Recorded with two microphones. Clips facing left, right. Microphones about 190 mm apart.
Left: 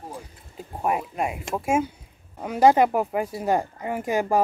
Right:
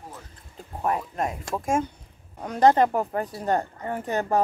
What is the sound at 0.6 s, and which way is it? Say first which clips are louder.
A woman's voice: left 1 dB; 10° left (ahead or behind).